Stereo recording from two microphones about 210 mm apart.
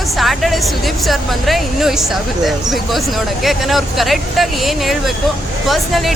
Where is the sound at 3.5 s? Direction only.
Centre (ahead or behind).